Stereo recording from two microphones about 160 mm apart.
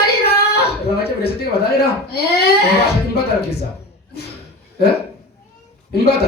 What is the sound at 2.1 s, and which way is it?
Speech, 90° left.